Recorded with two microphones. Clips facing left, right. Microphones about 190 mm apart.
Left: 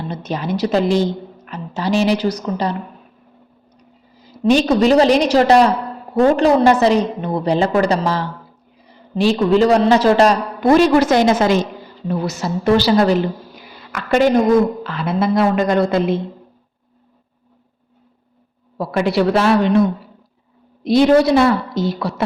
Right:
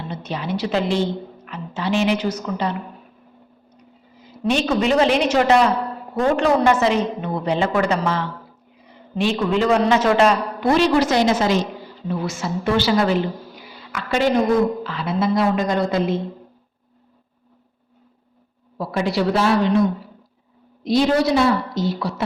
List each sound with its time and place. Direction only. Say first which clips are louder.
0.1 s a woman's voice: left 3 dB; 40° left (ahead or behind)
4.2 s a woman's voice: left 6 dB; 35° left (ahead or behind); by 11.6 s 55° left (ahead or behind)
12.0 s a woman's voice: left 4 dB; 40° left (ahead or behind)
13.9 s a woman's voice: left 5 dB; 50° left (ahead or behind)
18.8 s a woman's voice: left 4 dB; 60° left (ahead or behind)
20.8 s a woman's voice: left 5 dB; 60° left (ahead or behind)